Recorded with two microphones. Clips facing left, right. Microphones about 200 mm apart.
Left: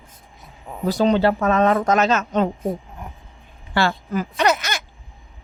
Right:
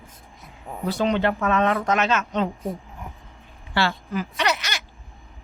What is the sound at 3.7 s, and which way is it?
Speech, 45° left (ahead or behind).